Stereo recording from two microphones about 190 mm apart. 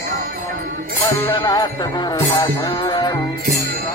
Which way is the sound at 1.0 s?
20° left (ahead or behind).